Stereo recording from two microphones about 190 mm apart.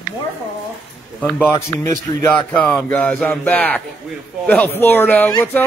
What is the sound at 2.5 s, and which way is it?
Speech, 5° left (ahead or behind).